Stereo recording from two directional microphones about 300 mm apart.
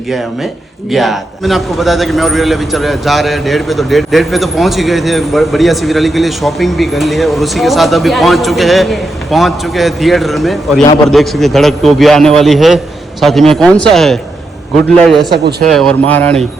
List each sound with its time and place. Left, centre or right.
0.9 s a man's voice: centre
15.3 s speech: right
15.7 s a man's voice: centre